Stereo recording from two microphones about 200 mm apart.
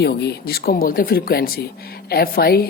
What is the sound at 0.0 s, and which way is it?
Speech, 55° left (ahead or behind).